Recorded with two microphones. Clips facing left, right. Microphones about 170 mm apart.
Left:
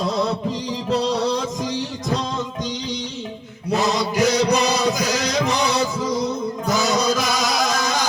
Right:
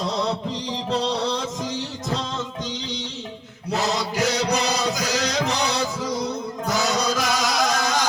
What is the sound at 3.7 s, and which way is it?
Mantra, 15° left (ahead or behind).